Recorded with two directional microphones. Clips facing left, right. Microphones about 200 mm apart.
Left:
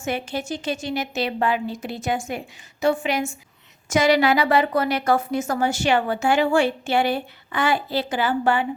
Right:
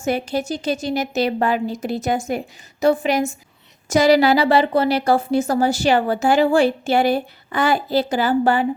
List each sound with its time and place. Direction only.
0.0 s a woman's voice: 40° right (ahead or behind)